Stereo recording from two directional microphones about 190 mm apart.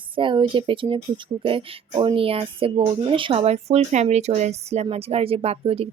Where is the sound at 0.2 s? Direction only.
25° right (ahead or behind).